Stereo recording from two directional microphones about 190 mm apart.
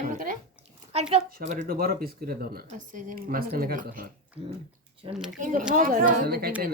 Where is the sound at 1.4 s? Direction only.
40° right (ahead or behind).